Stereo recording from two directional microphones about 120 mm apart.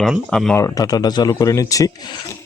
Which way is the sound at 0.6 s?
25° left (ahead or behind).